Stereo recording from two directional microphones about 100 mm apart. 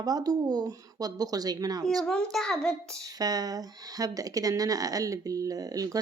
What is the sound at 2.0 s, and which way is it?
Speech, 5° left (ahead or behind).